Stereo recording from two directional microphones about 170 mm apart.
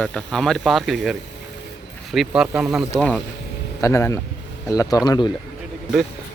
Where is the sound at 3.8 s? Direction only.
15° left (ahead or behind).